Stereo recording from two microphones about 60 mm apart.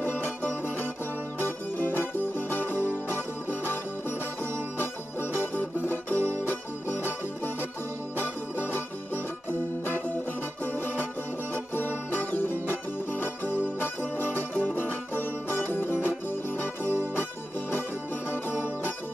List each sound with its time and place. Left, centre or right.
0.0 s music: left
5.3 s music: left
11.5 s music: left
17.1 s music: left